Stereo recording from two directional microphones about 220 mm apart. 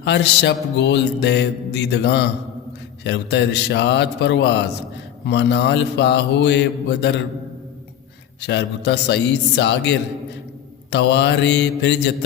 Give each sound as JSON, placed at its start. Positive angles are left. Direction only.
{"t": 0.0, "sound": "music", "side_deg": 50}
{"t": 8.4, "sound": "music", "side_deg": 50}